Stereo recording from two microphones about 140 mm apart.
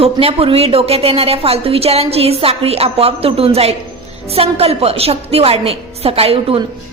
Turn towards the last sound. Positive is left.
turn(degrees=-45)  # may be behind; listen again after turning